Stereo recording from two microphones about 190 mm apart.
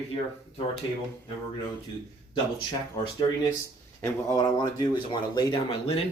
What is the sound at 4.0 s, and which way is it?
Speech, 15° left (ahead or behind).